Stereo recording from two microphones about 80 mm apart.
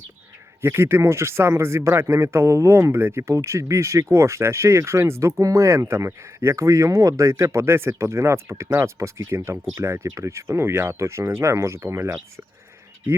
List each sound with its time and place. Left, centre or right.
0.6 s speech: right